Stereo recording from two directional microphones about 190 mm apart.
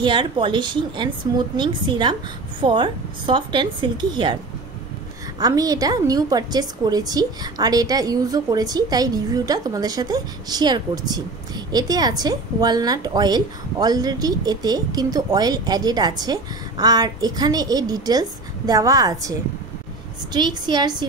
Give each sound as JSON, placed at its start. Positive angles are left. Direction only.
{"t": 0.0, "sound": "a woman's voice", "side_deg": -25}
{"t": 5.4, "sound": "a woman's voice", "side_deg": -20}
{"t": 20.3, "sound": "a woman's voice", "side_deg": -25}